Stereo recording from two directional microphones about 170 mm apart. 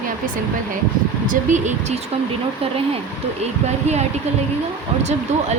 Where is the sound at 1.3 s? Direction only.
45° right (ahead or behind).